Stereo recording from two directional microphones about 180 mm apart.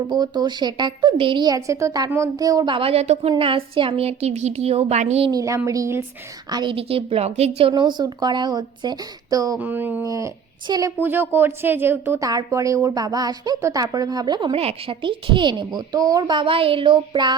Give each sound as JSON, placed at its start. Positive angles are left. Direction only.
{"t": 0.1, "sound": "a woman's voice", "side_deg": -25}
{"t": 5.3, "sound": "speech", "side_deg": -15}
{"t": 6.5, "sound": "a woman's voice", "side_deg": -25}
{"t": 7.7, "sound": "speech", "side_deg": -25}